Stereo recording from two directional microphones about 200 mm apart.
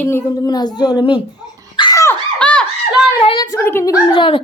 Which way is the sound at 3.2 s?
20° left (ahead or behind).